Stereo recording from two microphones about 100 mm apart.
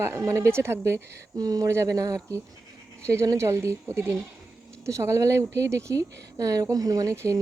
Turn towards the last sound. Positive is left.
turn(degrees=-40)  # may be behind; listen again after turning